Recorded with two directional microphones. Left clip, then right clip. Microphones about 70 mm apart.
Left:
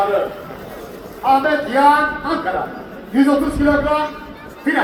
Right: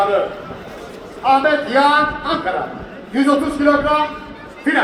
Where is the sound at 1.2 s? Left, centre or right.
Right.